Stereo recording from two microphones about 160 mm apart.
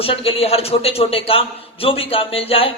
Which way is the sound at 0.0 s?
35° left (ahead or behind).